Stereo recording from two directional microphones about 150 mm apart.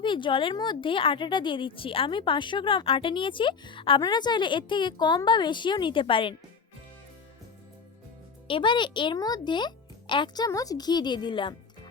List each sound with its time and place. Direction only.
0.0 s a woman's voice: 30° left (ahead or behind)
8.4 s a child's voice: 35° left (ahead or behind)